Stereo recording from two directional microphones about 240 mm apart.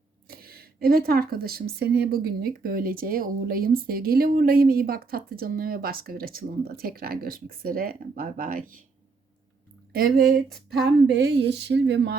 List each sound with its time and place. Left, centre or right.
0.3 s speech: right
10.2 s speech: centre
10.5 s speech: right